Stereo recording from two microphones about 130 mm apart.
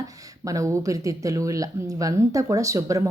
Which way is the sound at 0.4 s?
25° right (ahead or behind).